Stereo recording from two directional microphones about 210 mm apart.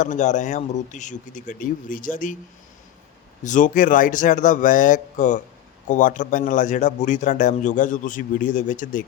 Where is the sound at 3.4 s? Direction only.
35° left (ahead or behind).